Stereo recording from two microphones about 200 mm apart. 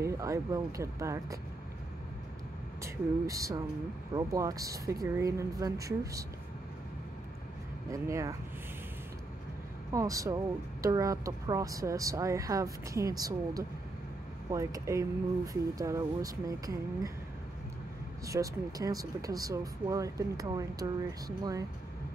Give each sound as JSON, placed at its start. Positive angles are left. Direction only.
{"t": 0.0, "sound": "speech", "side_deg": -15}
{"t": 2.8, "sound": "speech", "side_deg": -15}
{"t": 7.9, "sound": "speech", "side_deg": -15}
{"t": 9.9, "sound": "speech", "side_deg": -15}
{"t": 18.2, "sound": "speech", "side_deg": -15}